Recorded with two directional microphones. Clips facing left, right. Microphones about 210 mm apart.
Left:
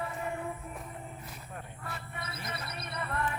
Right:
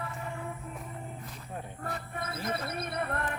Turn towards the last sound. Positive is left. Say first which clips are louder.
# right 2 dB
turn(degrees=-55)  # may be behind; listen again after turning